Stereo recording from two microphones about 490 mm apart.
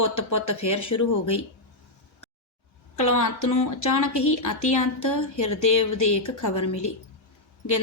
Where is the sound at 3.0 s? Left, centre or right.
Left.